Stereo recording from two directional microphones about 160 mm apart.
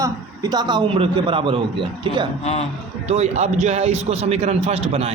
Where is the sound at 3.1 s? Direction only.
40° right (ahead or behind).